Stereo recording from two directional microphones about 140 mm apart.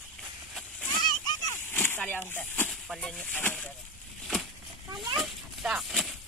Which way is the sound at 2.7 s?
Centre (ahead or behind).